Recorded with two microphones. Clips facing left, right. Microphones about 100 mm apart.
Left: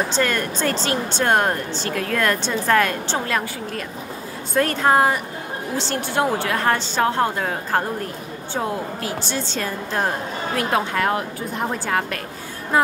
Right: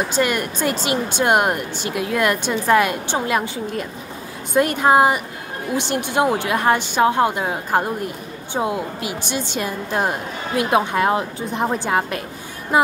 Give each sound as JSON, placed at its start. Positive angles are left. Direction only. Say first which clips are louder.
{"t": 0.1, "sound": "speech", "louder": "right 1 dB", "side_deg": -15}